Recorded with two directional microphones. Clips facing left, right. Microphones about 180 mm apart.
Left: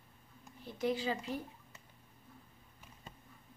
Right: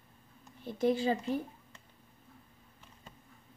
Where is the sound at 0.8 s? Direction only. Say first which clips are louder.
Right 6 dB; 50° right (ahead or behind).